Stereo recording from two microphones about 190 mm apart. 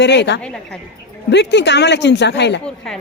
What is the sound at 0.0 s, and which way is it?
Speech, 65° left (ahead or behind).